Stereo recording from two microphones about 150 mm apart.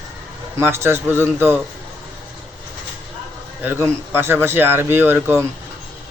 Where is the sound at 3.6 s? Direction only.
15° right (ahead or behind).